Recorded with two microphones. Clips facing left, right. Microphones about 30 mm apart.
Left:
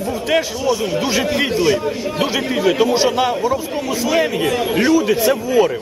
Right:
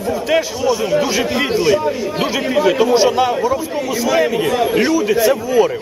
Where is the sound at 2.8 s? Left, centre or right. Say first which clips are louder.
Right 2 dB; centre.